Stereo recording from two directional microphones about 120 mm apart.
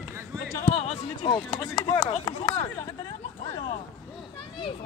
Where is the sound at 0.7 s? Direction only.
60° left (ahead or behind).